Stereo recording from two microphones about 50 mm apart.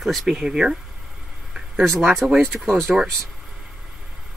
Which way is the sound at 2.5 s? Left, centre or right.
Centre.